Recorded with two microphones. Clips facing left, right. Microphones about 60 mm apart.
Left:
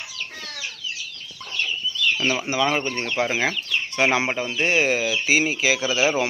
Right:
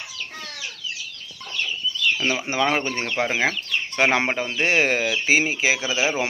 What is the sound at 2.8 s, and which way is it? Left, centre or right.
Speech, right.